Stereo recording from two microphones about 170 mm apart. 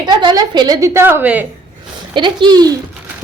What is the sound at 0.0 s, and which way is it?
A woman's voice, 25° right (ahead or behind).